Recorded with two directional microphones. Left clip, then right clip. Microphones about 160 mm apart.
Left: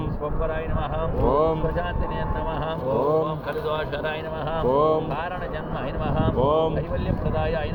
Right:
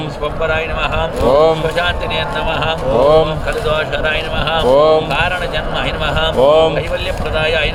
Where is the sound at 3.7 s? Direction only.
25° right (ahead or behind).